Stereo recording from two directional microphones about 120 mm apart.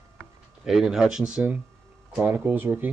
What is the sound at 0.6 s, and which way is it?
Speech, 5° right (ahead or behind).